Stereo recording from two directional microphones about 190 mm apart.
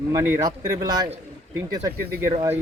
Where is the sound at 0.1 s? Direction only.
15° right (ahead or behind).